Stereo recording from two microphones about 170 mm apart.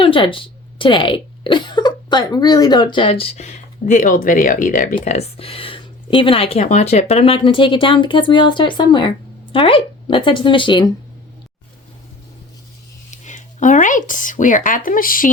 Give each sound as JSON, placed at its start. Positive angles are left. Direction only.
{"t": 0.0, "sound": "speech", "side_deg": 30}
{"t": 4.9, "sound": "speech", "side_deg": 35}
{"t": 13.1, "sound": "speech", "side_deg": 45}